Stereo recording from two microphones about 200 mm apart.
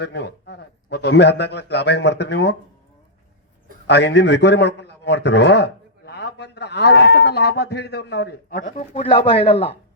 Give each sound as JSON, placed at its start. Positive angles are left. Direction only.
{"t": 0.0, "sound": "a man's voice", "side_deg": 55}
{"t": 3.8, "sound": "a man's voice", "side_deg": 60}